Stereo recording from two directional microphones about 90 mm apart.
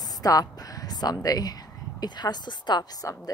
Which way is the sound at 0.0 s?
45° left (ahead or behind).